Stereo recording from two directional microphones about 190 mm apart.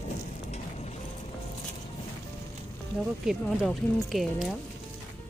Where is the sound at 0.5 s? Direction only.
35° left (ahead or behind).